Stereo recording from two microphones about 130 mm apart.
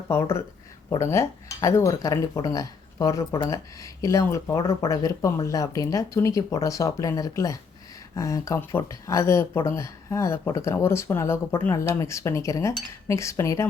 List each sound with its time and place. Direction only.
0.1 s speech: 20° left (ahead or behind)